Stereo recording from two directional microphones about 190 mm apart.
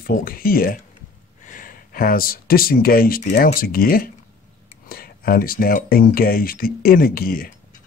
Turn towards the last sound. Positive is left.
turn(degrees=50)  # may be behind; listen again after turning